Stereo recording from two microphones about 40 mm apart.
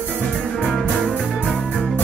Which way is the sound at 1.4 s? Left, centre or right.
Centre.